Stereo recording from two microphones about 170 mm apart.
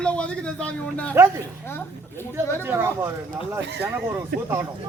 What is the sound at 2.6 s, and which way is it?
Speech, 15° right (ahead or behind).